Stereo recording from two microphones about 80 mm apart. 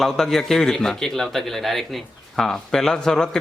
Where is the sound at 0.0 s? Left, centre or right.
Centre.